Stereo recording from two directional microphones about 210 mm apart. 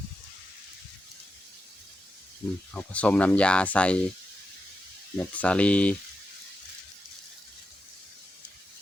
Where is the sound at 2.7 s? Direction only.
5° left (ahead or behind).